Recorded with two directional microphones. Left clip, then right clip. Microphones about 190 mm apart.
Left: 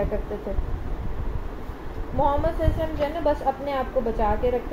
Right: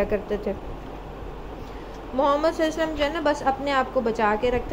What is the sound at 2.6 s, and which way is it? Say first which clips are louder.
A woman's voice: right 2 dB; 60° right (ahead or behind).